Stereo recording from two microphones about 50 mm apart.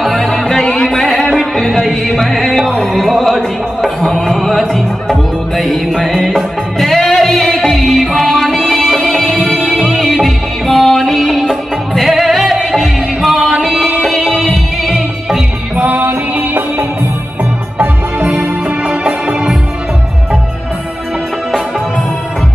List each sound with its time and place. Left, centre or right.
0.0 s music: centre
15.7 s music: right
18.9 s music: centre